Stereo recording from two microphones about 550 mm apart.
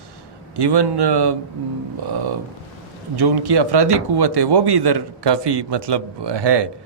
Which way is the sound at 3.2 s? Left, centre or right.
Right.